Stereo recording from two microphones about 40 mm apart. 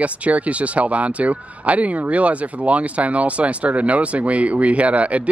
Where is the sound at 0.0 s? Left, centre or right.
Right.